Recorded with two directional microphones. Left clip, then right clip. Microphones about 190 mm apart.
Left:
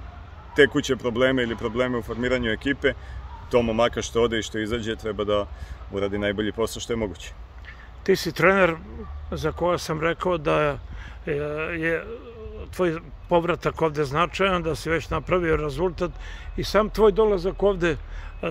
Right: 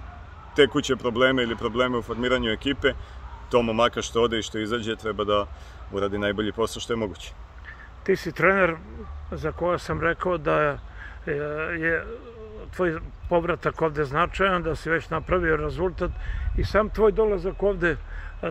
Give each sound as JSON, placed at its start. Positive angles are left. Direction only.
{"t": 0.6, "sound": "speech", "side_deg": 5}
{"t": 8.0, "sound": "speech", "side_deg": 15}
{"t": 17.8, "sound": "a sound", "side_deg": 10}